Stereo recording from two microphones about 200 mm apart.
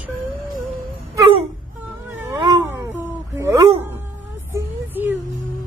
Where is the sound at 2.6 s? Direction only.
10° right (ahead or behind).